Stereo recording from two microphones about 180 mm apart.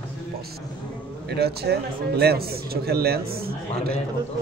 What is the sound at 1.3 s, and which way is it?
A man's voice, 65° right (ahead or behind).